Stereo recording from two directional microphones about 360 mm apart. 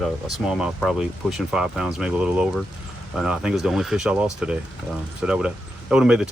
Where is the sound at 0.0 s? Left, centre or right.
Centre.